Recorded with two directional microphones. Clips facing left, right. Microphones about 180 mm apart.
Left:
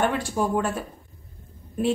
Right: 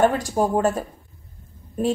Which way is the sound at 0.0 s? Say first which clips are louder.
Right 5 dB; 40° right (ahead or behind).